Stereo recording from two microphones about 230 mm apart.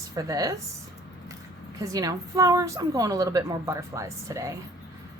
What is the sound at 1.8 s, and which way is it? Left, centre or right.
A woman's voice, centre.